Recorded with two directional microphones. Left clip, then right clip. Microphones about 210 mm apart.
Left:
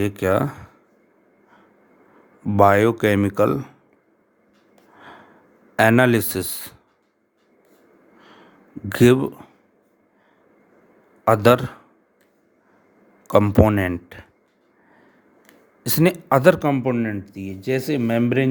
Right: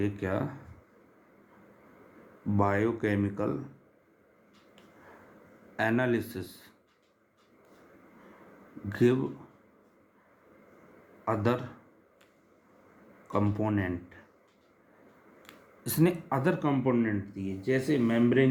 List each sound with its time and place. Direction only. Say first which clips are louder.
0.0 s speech: left 12 dB; 50° left (ahead or behind)
2.6 s speech: left 14 dB; 55° left (ahead or behind)
5.7 s speech: left 13 dB; 50° left (ahead or behind)
8.9 s speech: left 11 dB; 50° left (ahead or behind)
11.3 s speech: left 15 dB; 55° left (ahead or behind)
13.2 s speech: left 14 dB; 55° left (ahead or behind)
15.8 s speech: left 8 dB; 40° left (ahead or behind)